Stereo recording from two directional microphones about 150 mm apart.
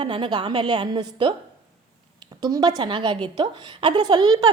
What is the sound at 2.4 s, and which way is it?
A woman's voice, 25° right (ahead or behind).